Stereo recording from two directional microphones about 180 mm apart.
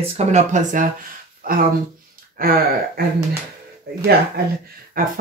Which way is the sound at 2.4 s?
55° right (ahead or behind).